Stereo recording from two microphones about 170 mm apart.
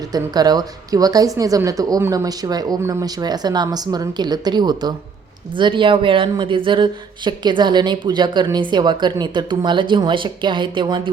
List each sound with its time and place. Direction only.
0.1 s speech: 25° right (ahead or behind)